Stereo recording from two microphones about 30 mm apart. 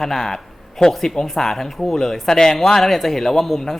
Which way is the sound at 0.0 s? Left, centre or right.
Centre.